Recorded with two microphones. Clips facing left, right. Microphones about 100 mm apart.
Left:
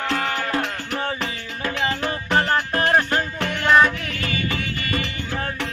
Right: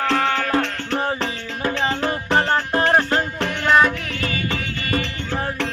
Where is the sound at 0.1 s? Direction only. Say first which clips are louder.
Right 4 dB; 30° right (ahead or behind).